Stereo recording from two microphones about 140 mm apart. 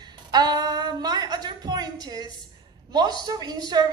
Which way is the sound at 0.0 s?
30° right (ahead or behind).